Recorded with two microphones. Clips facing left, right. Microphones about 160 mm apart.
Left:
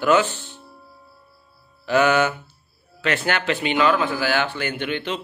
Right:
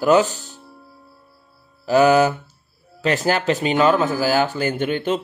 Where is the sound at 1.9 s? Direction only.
35° right (ahead or behind).